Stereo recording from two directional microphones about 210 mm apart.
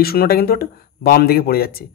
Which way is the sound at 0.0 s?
45° left (ahead or behind).